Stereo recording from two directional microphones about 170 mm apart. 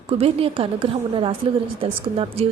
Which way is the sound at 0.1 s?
35° right (ahead or behind).